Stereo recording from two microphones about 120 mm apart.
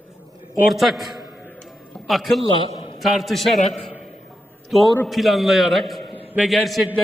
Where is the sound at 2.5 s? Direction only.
45° left (ahead or behind).